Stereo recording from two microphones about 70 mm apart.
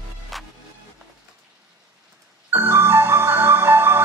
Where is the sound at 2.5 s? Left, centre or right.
Right.